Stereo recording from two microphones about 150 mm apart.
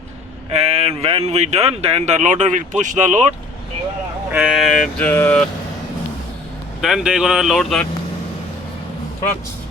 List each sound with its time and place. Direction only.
0.5 s speech: 45° right (ahead or behind)
2.2 s speech: 55° right (ahead or behind)
4.3 s vehicle: 5° right (ahead or behind)
6.8 s vehicle: 5° right (ahead or behind)